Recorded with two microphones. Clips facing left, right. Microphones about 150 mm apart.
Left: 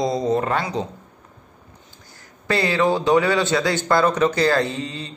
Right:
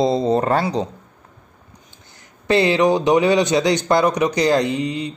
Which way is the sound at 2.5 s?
20° right (ahead or behind).